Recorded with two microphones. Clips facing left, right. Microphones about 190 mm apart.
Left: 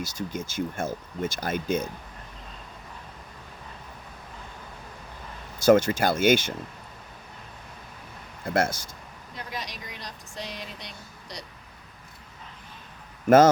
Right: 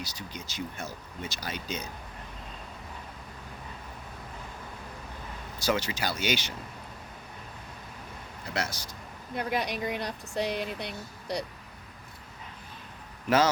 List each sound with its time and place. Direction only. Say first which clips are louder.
0.0 s speech: left 8 dB; 50° left (ahead or behind)
5.6 s speech: left 10 dB; 50° left (ahead or behind)
8.4 s speech: left 8 dB; 50° left (ahead or behind)
9.3 s speech: right 8 dB; 60° right (ahead or behind)
13.2 s a man's voice: left 8 dB; 50° left (ahead or behind)